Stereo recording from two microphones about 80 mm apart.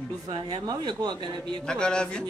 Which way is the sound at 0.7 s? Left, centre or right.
Right.